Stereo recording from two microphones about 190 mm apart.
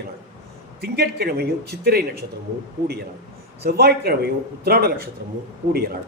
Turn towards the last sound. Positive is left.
turn(degrees=-55)  # may be behind; listen again after turning